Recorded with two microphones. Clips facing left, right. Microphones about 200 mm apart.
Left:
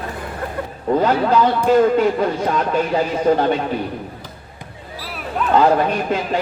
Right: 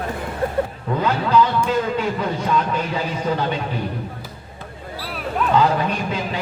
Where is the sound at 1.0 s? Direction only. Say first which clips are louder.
Left 1 dB; 50° left (ahead or behind).